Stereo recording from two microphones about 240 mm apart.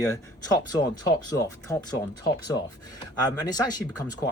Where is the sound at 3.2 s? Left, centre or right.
Centre.